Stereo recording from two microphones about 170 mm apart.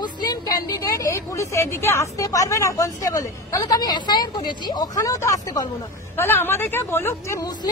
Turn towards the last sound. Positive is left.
turn(degrees=15)  # may be behind; listen again after turning